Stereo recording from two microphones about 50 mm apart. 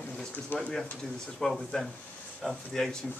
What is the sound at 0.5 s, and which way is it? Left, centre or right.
Speech, left.